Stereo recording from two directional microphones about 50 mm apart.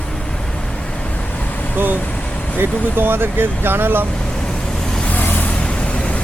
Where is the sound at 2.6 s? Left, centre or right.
Right.